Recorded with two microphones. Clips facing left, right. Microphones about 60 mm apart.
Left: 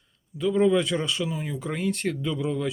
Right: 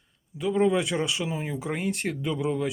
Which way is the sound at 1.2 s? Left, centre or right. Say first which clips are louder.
Left 1 dB; right.